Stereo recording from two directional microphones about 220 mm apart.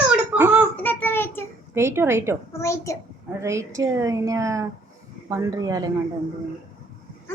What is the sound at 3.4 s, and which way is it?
A woman's voice, 15° right (ahead or behind).